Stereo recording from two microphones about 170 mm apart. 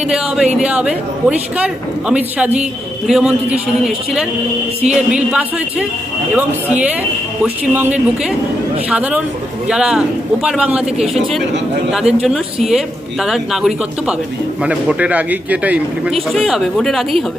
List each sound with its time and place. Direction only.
0.6 s a man's voice: 5° right (ahead or behind)